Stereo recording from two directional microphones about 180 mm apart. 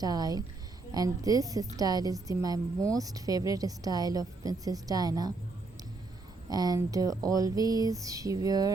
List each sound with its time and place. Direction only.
0.0 s a woman's voice: 20° right (ahead or behind)
6.5 s a woman's voice: 20° right (ahead or behind)